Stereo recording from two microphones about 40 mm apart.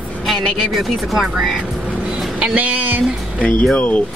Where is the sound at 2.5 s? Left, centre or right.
Right.